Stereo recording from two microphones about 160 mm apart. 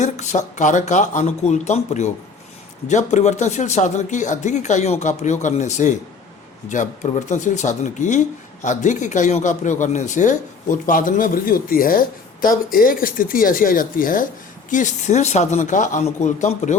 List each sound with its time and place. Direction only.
0.0 s speech: 50° left (ahead or behind)